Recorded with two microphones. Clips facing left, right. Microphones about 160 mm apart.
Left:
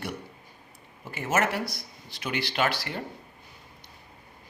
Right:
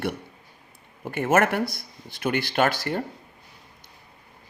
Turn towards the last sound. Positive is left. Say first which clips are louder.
# right 5 dB
turn(degrees=-50)  # may be behind; listen again after turning